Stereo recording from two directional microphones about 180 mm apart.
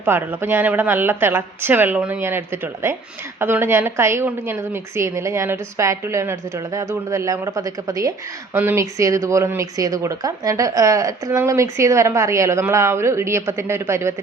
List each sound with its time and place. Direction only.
0.0 s speech: 10° right (ahead or behind)